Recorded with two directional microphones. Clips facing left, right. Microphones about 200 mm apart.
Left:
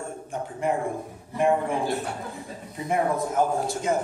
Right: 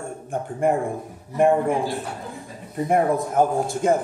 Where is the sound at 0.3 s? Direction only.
50° right (ahead or behind).